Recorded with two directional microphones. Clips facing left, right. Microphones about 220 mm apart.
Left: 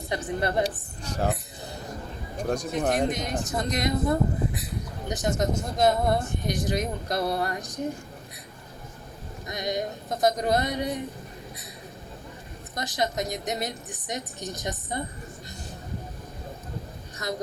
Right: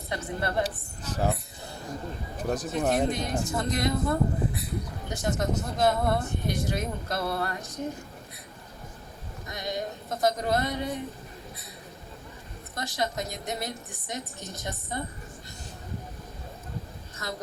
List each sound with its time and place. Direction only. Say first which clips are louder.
0.1 s speech: left 3 dB; 15° left (ahead or behind)
1.0 s speech: even; 5° right (ahead or behind)
2.4 s speech: left 2 dB; 5° right (ahead or behind)
3.1 s speech: even; 20° left (ahead or behind)
9.5 s speech: left 4 dB; 15° left (ahead or behind)
12.7 s speech: left 3 dB; 15° left (ahead or behind)